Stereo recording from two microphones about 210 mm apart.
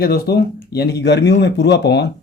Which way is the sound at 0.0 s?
50° left (ahead or behind).